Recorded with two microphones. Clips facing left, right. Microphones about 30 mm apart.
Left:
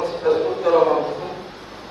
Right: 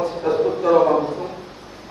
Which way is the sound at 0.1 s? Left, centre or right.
Left.